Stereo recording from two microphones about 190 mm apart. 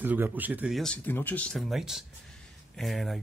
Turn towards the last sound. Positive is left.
turn(degrees=0)  # may be behind; listen again after turning